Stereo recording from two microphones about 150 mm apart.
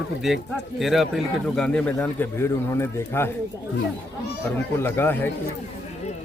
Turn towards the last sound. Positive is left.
turn(degrees=15)  # may be behind; listen again after turning